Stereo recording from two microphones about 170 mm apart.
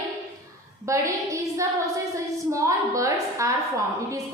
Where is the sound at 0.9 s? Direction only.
20° right (ahead or behind).